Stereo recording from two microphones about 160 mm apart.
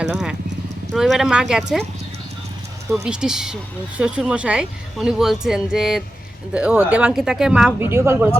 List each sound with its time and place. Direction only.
0.0 s speech: 5° right (ahead or behind)
2.9 s speech: 5° right (ahead or behind)
7.8 s speech: 15° right (ahead or behind)